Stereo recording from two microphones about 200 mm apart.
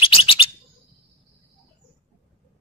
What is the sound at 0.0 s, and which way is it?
Bird, 30° left (ahead or behind).